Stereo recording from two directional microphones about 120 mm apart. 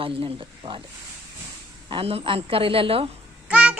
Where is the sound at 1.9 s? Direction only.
50° right (ahead or behind).